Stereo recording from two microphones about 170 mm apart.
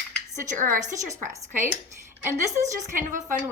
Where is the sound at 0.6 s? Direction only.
50° right (ahead or behind).